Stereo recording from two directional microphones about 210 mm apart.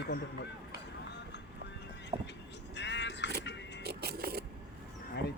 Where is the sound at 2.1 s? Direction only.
25° right (ahead or behind).